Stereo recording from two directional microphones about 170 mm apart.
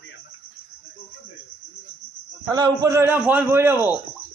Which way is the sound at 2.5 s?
20° right (ahead or behind).